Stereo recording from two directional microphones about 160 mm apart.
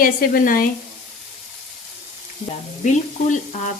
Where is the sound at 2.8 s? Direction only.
50° left (ahead or behind).